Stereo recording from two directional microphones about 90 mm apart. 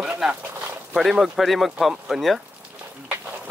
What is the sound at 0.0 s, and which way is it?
Speech, 15° right (ahead or behind).